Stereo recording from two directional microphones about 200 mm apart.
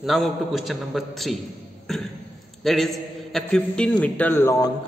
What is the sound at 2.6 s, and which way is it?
A man's voice, centre (ahead or behind).